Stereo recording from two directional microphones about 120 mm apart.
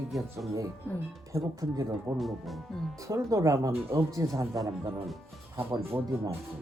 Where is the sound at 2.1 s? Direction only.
Centre (ahead or behind).